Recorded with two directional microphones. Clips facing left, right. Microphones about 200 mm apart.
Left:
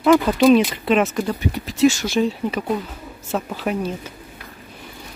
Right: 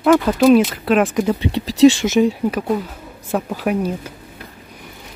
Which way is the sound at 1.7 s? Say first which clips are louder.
Right 6 dB; 30° right (ahead or behind).